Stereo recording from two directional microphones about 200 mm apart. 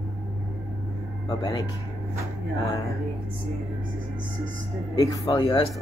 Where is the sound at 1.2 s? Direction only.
20° left (ahead or behind).